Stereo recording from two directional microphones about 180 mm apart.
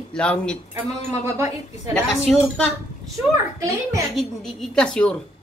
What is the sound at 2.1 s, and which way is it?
Speech, centre (ahead or behind).